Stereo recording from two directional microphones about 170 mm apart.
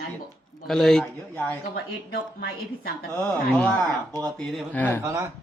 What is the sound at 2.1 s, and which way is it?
Speech, 60° left (ahead or behind).